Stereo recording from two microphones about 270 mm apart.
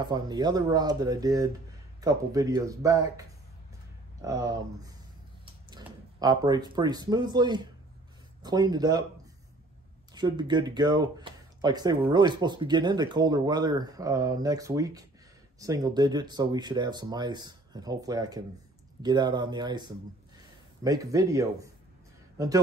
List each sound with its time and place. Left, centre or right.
0.0 s speech: centre
10.1 s speech: centre